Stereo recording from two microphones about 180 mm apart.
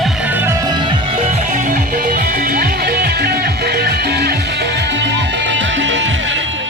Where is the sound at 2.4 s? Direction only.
60° right (ahead or behind).